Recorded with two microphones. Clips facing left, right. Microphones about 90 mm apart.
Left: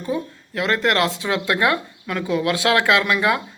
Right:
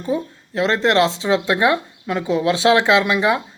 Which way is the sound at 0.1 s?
25° right (ahead or behind).